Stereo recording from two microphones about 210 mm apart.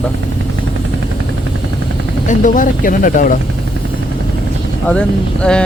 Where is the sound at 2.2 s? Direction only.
40° left (ahead or behind).